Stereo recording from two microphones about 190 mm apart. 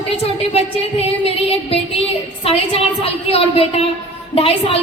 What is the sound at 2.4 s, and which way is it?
A woman's voice, 30° left (ahead or behind).